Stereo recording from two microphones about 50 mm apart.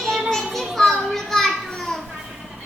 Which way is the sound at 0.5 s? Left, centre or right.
Centre.